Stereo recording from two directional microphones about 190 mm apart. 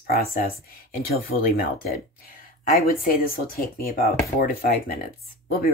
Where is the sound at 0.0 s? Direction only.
50° left (ahead or behind).